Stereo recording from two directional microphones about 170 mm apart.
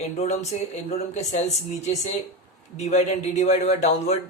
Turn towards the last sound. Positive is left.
turn(degrees=40)  # may be behind; listen again after turning